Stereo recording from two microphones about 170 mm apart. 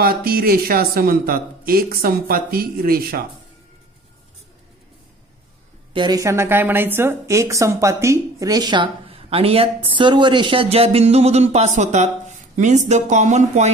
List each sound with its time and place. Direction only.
0.0 s speech: 60° right (ahead or behind)
5.9 s speech: 20° right (ahead or behind); by 13.7 s 45° right (ahead or behind)